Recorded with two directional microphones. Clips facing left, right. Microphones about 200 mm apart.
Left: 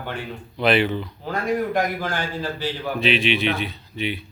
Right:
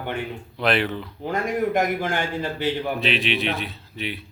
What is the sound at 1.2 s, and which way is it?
Speech, 20° right (ahead or behind).